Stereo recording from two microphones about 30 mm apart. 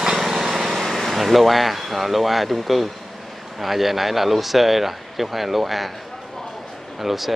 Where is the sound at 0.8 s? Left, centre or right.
Centre.